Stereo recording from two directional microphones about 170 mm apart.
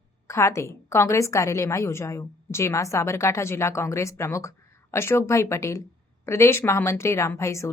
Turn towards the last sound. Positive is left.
turn(degrees=15)  # may be behind; listen again after turning